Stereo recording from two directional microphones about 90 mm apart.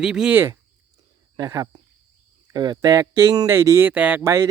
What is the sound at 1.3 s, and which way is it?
Speech, 40° right (ahead or behind).